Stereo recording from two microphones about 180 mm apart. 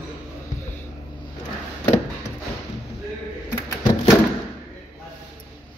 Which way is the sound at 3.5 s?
20° left (ahead or behind).